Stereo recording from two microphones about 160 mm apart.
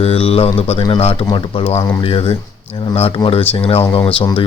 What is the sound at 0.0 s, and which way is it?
Speech, 35° left (ahead or behind).